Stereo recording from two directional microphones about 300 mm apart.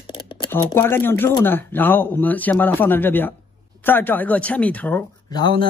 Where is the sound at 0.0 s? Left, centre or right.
Centre.